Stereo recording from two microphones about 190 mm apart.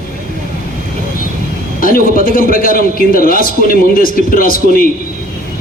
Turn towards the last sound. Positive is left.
turn(degrees=50)  # may be behind; listen again after turning